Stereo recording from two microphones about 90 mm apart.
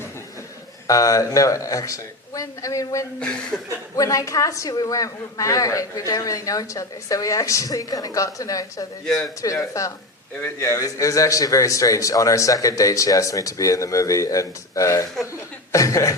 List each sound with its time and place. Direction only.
0.9 s a woman's voice: 40° left (ahead or behind)